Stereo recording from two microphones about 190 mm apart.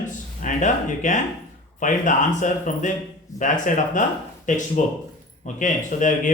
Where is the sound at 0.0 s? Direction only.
40° left (ahead or behind).